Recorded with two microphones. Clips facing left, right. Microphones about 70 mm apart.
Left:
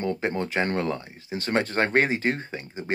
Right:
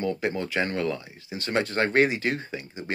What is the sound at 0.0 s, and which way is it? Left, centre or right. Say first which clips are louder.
Speech: left 1 dB; left.